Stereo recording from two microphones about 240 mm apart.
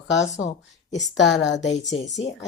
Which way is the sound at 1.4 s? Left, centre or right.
Left.